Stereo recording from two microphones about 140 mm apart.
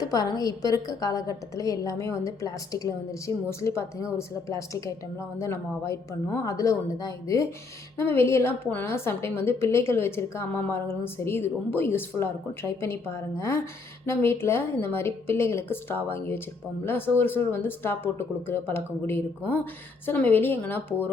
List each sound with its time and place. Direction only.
0.0 s a woman's voice: 25° left (ahead or behind)